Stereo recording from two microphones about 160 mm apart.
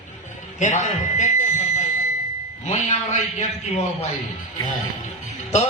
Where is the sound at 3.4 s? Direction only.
45° left (ahead or behind).